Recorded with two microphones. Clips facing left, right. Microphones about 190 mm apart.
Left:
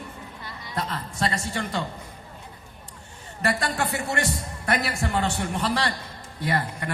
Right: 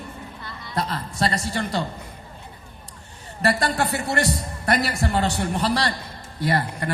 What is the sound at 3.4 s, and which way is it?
A man's voice, 35° right (ahead or behind).